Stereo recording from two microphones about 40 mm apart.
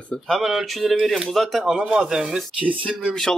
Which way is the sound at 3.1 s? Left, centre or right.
Centre.